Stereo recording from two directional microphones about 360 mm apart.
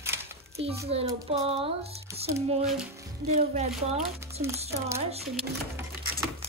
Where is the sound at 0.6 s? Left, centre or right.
Centre.